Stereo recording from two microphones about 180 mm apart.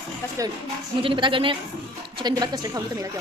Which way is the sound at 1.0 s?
30° right (ahead or behind).